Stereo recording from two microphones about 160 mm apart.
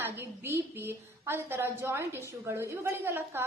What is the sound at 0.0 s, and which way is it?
A woman's voice, 15° right (ahead or behind).